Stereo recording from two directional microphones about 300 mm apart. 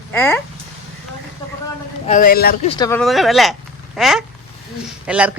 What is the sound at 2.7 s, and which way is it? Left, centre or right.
Speech, centre.